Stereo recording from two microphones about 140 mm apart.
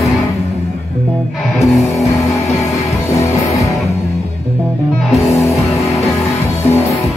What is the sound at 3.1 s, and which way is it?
Music, 25° left (ahead or behind).